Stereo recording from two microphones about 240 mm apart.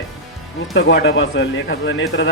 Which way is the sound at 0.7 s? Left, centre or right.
Left.